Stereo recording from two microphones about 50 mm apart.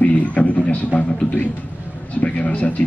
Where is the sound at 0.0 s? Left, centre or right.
Left.